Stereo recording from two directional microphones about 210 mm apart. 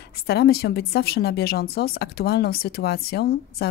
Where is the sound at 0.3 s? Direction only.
50° left (ahead or behind).